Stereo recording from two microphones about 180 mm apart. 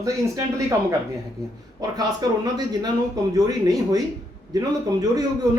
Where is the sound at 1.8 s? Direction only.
20° right (ahead or behind).